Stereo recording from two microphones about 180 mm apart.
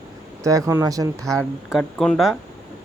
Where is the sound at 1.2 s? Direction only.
5° left (ahead or behind).